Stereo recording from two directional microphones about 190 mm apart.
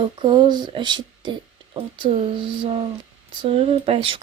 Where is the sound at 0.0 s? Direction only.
25° right (ahead or behind).